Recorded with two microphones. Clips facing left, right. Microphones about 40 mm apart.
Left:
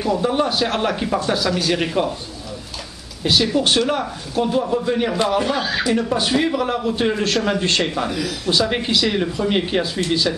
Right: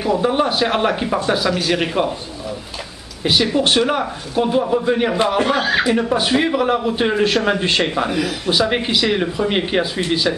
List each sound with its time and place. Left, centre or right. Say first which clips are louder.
0.0 s a man's voice: right 2 dB; centre
3.3 s a man's voice: right 1 dB; centre
5.4 s a man's voice: right 4 dB; right